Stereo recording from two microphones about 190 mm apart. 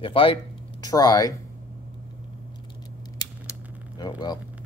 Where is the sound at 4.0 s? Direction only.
20° left (ahead or behind).